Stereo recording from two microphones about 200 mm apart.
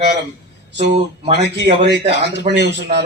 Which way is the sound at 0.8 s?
35° right (ahead or behind).